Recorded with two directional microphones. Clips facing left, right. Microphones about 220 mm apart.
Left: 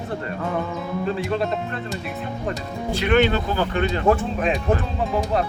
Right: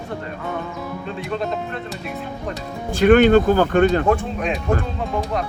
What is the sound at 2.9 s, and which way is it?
Speech, 45° right (ahead or behind).